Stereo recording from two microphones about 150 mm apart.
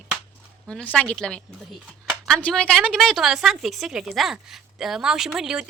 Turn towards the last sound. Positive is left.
turn(degrees=-5)  # may be behind; listen again after turning